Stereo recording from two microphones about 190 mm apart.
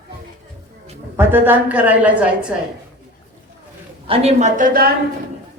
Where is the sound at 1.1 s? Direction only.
10° right (ahead or behind).